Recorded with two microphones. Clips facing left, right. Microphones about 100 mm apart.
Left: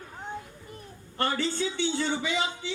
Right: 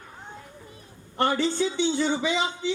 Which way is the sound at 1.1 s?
20° right (ahead or behind).